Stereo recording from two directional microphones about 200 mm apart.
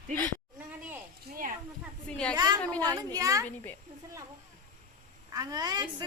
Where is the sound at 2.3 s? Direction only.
20° right (ahead or behind).